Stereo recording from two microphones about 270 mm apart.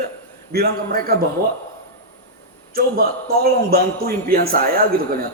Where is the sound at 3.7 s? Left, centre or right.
Right.